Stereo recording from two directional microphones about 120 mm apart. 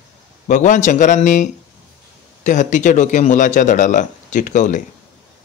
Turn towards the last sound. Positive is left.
turn(degrees=90)